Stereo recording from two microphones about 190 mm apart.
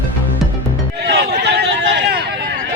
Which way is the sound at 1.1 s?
60° right (ahead or behind).